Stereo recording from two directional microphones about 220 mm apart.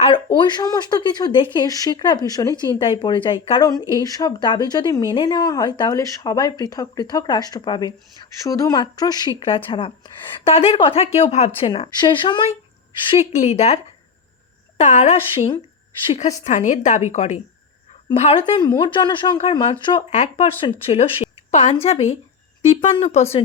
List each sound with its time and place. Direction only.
0.0 s speech: 20° left (ahead or behind)
14.8 s a woman's voice: 30° left (ahead or behind)
20.0 s a woman's voice: 30° left (ahead or behind)